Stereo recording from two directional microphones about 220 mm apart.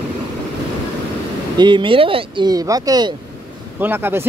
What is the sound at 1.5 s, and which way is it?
Speech, 20° right (ahead or behind).